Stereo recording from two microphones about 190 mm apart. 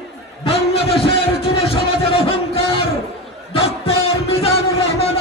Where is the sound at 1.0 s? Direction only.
30° left (ahead or behind).